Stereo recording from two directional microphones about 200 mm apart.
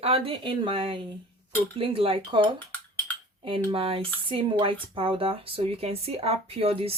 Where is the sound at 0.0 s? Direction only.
30° right (ahead or behind).